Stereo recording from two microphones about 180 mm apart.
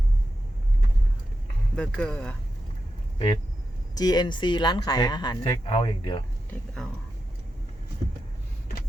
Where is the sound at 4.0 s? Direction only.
20° left (ahead or behind).